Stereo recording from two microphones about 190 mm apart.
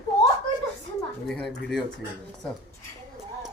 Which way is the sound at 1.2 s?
Centre (ahead or behind).